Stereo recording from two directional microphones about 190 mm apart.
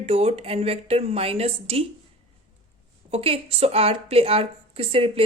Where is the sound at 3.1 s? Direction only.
30° right (ahead or behind).